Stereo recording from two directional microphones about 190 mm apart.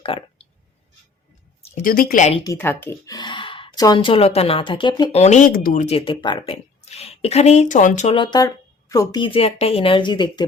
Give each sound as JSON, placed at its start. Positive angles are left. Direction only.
{"t": 0.0, "sound": "clicking", "side_deg": 30}
{"t": 1.6, "sound": "a sound", "side_deg": 35}
{"t": 1.9, "sound": "a woman's voice", "side_deg": 50}
{"t": 2.4, "sound": "speech", "side_deg": 15}
{"t": 5.2, "sound": "a woman's voice", "side_deg": 40}
{"t": 5.8, "sound": "a woman's voice", "side_deg": 30}
{"t": 8.1, "sound": "a woman's voice", "side_deg": 25}